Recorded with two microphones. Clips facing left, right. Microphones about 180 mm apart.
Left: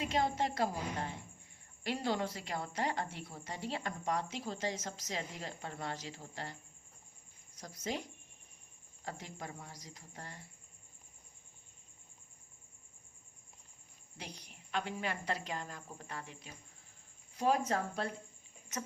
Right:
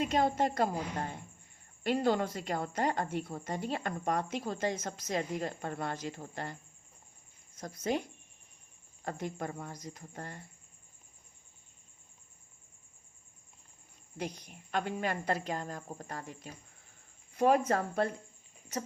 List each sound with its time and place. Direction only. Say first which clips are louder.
0.0 s a woman's voice: right 5 dB; 50° right (ahead or behind)
1.8 s a woman's voice: right 6 dB; 55° right (ahead or behind)
9.0 s a woman's voice: right 8 dB; 55° right (ahead or behind)
14.2 s a woman's voice: right 10 dB; 50° right (ahead or behind)
17.3 s a woman's voice: right 5 dB; 60° right (ahead or behind)